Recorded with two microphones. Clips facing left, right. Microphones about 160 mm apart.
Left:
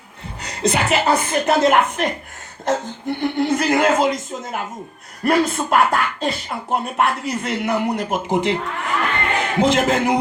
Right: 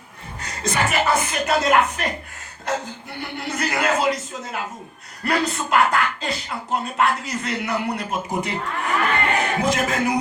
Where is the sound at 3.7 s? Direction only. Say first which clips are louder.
Left 2 dB; 50° left (ahead or behind).